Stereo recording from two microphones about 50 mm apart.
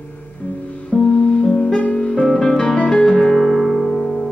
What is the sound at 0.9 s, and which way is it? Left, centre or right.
Music, centre.